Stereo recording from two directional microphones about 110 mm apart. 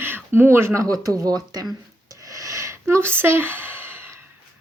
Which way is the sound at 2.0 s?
30° right (ahead or behind).